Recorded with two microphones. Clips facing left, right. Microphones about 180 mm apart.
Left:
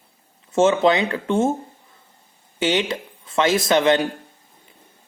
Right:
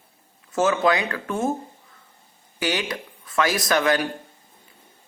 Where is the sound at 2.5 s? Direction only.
25° left (ahead or behind).